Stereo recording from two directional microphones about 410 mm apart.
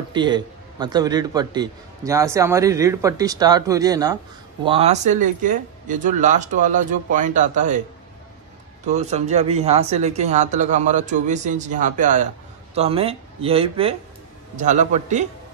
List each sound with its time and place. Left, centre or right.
0.1 s a man's voice: centre
8.8 s a man's voice: centre